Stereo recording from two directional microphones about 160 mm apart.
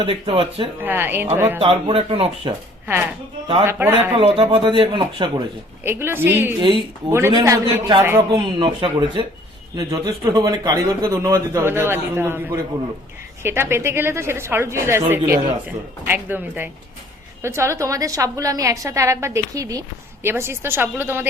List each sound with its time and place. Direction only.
0.0 s a man's voice: 35° right (ahead or behind)
0.8 s speech: 15° right (ahead or behind)
1.5 s a man's voice: 35° right (ahead or behind)
3.7 s speech: 15° right (ahead or behind)
4.2 s a man's voice: 35° right (ahead or behind)
5.8 s speech: 15° right (ahead or behind)
6.6 s a man's voice: 30° right (ahead or behind)
7.1 s a man's voice: 15° right (ahead or behind)
8.4 s a man's voice: 30° right (ahead or behind); by 21.2 s 15° right (ahead or behind)